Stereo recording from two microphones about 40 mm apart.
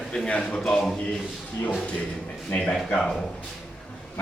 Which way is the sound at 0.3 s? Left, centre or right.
Left.